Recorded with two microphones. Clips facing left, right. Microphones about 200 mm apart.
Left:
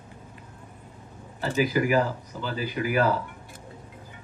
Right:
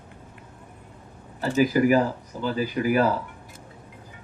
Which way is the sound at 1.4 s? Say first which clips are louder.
Right 4 dB; 40° right (ahead or behind).